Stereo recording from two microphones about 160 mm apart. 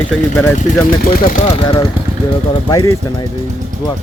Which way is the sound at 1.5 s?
35° left (ahead or behind).